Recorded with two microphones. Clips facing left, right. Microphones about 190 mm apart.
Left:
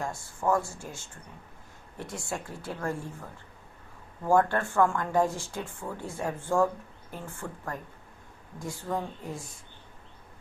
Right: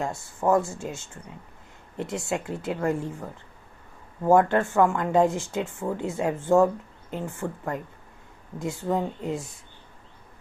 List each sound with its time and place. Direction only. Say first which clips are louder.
0.0 s speech: right 4 dB; 25° right (ahead or behind)
4.2 s speech: right 5 dB; 20° right (ahead or behind)